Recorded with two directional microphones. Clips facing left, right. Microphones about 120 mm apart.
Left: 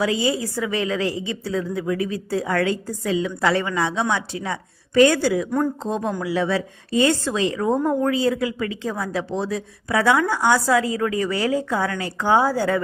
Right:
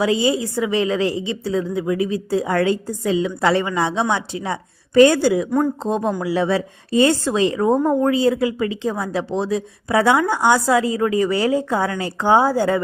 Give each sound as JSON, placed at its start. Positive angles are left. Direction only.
{"t": 0.0, "sound": "speech", "side_deg": -25}
{"t": 5.8, "sound": "speech", "side_deg": -35}